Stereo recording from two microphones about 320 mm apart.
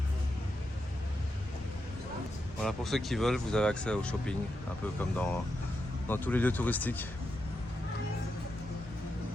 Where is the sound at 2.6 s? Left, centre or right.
Centre.